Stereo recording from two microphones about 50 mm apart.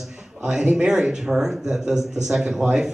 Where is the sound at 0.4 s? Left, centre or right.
Centre.